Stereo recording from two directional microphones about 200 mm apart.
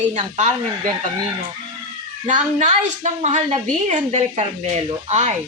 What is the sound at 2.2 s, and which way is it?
A woman's voice, 35° right (ahead or behind).